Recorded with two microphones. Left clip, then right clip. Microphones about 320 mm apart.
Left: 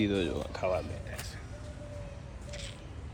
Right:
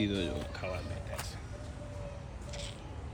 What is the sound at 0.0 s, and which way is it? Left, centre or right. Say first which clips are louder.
Speech: left 4 dB; left.